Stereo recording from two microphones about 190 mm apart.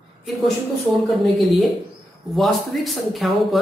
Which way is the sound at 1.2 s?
Centre (ahead or behind).